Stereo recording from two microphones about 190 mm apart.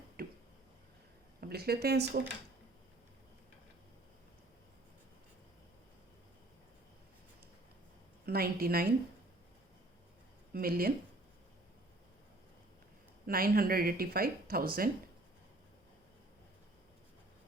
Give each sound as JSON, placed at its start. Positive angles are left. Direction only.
{"t": 0.2, "sound": "a sound", "side_deg": -50}
{"t": 1.4, "sound": "speech", "side_deg": -55}
{"t": 8.3, "sound": "speech", "side_deg": -50}
{"t": 10.5, "sound": "speech", "side_deg": -50}
{"t": 13.2, "sound": "speech", "side_deg": -50}